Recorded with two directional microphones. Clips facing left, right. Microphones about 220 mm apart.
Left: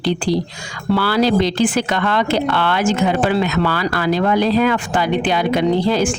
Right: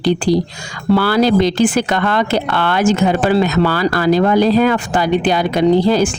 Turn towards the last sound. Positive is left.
turn(degrees=-40)  # may be behind; listen again after turning